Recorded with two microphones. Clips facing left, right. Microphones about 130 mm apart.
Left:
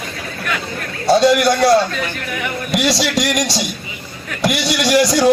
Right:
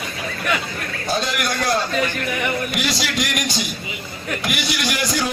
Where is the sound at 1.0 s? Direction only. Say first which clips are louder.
Left 12 dB; 75° left (ahead or behind).